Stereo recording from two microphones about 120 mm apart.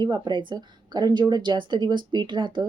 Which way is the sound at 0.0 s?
40° right (ahead or behind).